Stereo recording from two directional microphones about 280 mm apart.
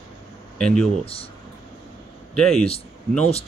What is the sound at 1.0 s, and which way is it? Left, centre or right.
Speech, centre.